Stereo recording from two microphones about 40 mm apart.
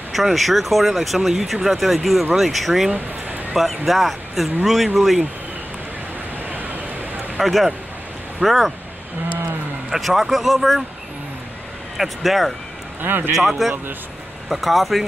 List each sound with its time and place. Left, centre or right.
0.1 s speech: centre
6.5 s vehicle: right
7.3 s speech: centre
9.8 s speech: centre
12.0 s speech: centre
13.0 s a man's voice: right
13.5 s speech: centre